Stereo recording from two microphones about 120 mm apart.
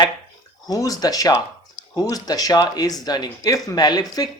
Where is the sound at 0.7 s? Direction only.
30° left (ahead or behind).